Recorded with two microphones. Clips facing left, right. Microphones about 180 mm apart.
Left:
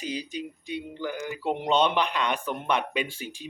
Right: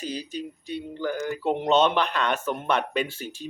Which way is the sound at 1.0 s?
45° right (ahead or behind).